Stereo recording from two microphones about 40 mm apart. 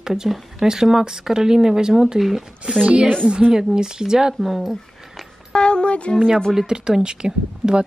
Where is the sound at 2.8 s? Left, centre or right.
Right.